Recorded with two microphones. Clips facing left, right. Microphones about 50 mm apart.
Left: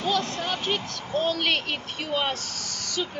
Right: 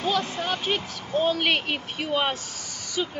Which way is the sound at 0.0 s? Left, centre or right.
Centre.